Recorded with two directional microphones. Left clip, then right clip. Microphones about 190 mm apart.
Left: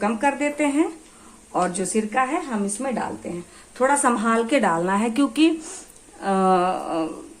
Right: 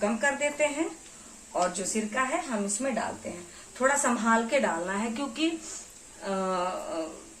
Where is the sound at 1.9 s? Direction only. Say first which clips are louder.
Left 8 dB; 55° left (ahead or behind).